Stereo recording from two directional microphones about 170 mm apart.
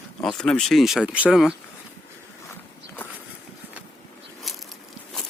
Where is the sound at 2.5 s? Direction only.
10° left (ahead or behind).